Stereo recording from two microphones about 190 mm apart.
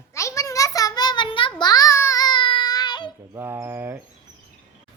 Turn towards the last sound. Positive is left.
turn(degrees=-10)  # may be behind; listen again after turning